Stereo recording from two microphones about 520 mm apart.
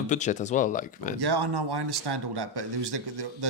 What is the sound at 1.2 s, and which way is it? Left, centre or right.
Speech, right.